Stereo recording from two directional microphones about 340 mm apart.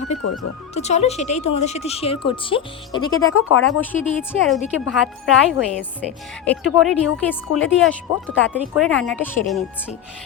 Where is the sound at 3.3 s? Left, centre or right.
Left.